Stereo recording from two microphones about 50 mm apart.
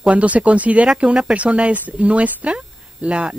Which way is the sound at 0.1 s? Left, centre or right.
Right.